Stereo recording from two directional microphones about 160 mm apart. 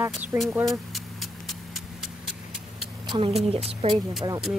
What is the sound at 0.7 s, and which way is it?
Vehicle, centre (ahead or behind).